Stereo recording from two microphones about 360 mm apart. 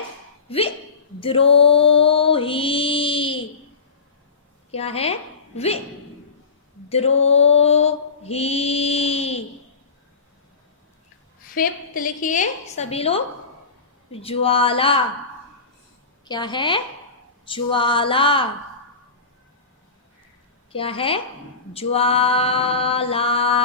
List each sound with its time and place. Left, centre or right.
0.4 s speech: centre
1.2 s mantra: centre
4.7 s mantra: centre
6.8 s a sound: centre
7.2 s mantra: centre
11.5 s a woman's voice: left
14.1 s mantra: centre
16.2 s mantra: centre
20.7 s mantra: centre